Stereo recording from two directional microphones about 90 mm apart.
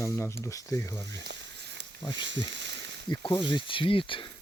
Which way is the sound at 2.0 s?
55° left (ahead or behind).